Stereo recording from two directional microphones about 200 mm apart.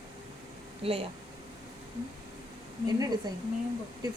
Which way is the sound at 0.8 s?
30° right (ahead or behind).